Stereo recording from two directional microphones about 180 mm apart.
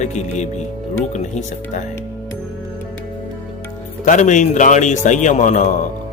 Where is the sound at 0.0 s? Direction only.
40° left (ahead or behind).